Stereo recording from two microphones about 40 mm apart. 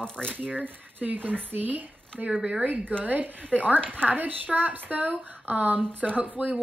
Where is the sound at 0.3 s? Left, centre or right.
Right.